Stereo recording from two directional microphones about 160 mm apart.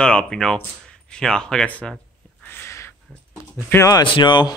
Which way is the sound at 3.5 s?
15° left (ahead or behind).